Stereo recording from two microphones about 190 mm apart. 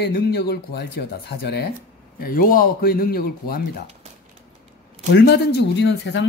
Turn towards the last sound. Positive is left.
turn(degrees=70)  # may be behind; listen again after turning